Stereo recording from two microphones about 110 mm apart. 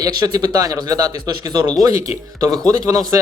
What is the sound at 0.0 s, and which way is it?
Speech, 40° right (ahead or behind).